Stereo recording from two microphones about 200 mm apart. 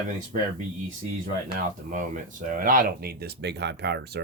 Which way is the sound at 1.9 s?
40° right (ahead or behind).